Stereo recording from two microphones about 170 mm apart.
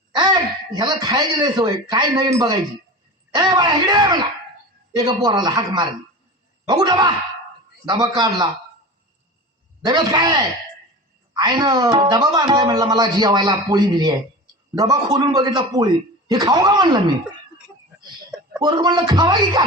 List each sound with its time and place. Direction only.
0.2 s speech: 25° right (ahead or behind)
3.3 s speech: 25° right (ahead or behind)
9.8 s speech: 25° right (ahead or behind)
18.6 s speech: 25° right (ahead or behind)